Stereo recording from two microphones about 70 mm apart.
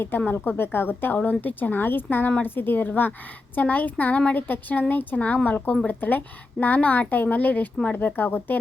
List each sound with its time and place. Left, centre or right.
0.3 s a woman's voice: left